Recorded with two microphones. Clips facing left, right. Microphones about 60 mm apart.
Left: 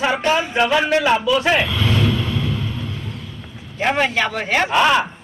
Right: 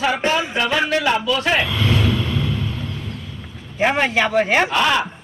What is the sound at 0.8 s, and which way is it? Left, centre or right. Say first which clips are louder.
Speech: left 2 dB; left.